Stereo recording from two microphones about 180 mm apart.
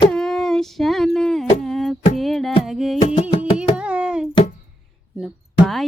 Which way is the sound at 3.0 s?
35° left (ahead or behind).